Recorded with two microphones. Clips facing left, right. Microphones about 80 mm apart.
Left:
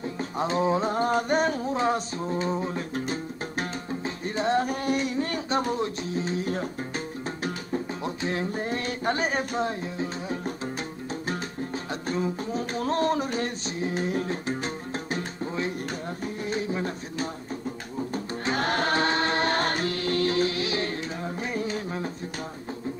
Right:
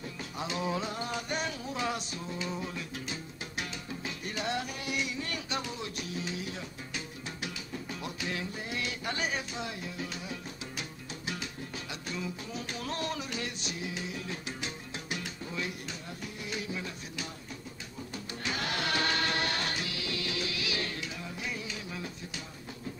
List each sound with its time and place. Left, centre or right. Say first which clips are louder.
0.0 s music: left 9 dB; left
11.9 s a sound: left 10 dB; left
16.4 s music: left 9 dB; left